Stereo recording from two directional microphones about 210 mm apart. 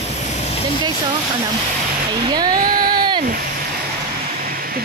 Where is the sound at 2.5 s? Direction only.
45° right (ahead or behind).